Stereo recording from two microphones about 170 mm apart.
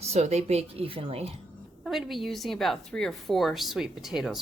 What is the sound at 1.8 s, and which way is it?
A woman's voice, centre (ahead or behind).